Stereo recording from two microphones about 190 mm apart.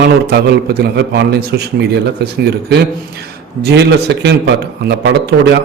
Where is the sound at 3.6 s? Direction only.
65° right (ahead or behind).